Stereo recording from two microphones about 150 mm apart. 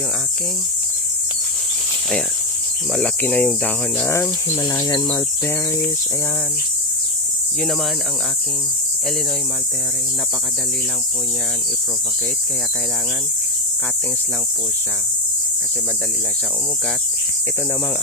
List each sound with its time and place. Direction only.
2.9 s speech: 5° left (ahead or behind)
4.6 s cricket: 25° left (ahead or behind)